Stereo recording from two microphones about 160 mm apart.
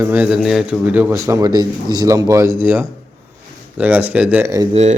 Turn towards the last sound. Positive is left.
turn(degrees=-45)  # may be behind; listen again after turning